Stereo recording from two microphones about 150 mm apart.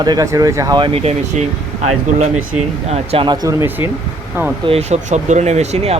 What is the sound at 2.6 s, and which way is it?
Speech, 45° right (ahead or behind).